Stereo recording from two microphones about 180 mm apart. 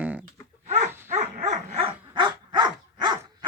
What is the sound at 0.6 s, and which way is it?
Dog, 40° right (ahead or behind).